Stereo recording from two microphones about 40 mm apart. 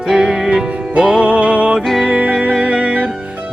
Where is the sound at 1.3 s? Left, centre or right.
Right.